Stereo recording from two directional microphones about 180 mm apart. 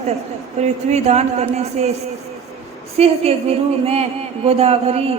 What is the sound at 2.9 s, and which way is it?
A woman's voice, 35° right (ahead or behind).